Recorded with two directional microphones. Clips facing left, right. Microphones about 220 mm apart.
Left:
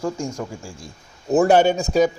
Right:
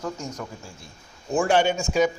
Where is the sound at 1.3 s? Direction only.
40° left (ahead or behind).